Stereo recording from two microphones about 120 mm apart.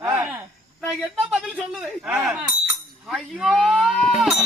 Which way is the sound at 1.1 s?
5° right (ahead or behind).